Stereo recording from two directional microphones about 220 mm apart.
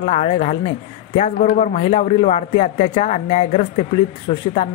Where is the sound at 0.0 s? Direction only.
30° left (ahead or behind).